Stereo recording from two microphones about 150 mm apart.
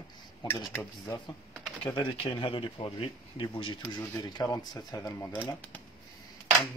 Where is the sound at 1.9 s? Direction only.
35° left (ahead or behind).